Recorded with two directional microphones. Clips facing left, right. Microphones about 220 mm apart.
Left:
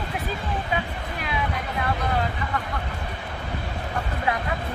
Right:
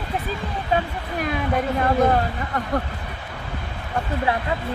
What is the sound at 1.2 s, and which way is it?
Speech, 45° right (ahead or behind).